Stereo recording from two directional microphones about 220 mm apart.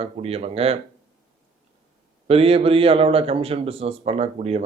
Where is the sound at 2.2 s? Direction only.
25° right (ahead or behind).